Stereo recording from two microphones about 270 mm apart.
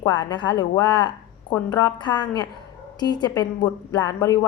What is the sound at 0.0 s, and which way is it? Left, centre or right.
Speech, centre.